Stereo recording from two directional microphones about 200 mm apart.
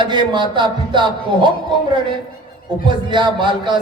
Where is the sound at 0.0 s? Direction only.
25° right (ahead or behind).